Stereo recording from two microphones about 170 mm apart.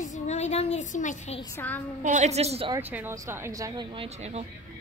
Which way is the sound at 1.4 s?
15° left (ahead or behind).